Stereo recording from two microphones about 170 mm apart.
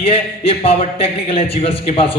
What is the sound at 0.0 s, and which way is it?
A man's voice, 35° left (ahead or behind).